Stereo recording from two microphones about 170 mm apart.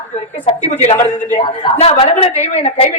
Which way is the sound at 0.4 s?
40° left (ahead or behind).